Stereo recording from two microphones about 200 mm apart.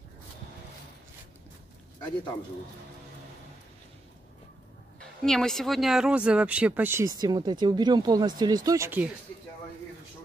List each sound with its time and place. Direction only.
5.2 s speech: centre (ahead or behind)